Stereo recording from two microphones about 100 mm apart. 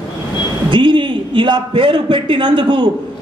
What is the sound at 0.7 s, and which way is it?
A man's voice, 55° right (ahead or behind).